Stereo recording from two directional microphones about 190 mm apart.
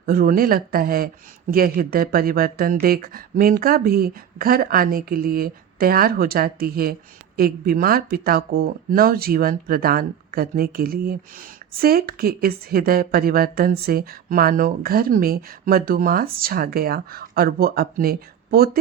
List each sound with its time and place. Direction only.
0.0 s speech: 50° right (ahead or behind)